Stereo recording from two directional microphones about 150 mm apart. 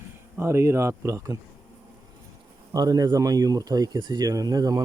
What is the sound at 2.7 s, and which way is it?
Speech, 25° right (ahead or behind).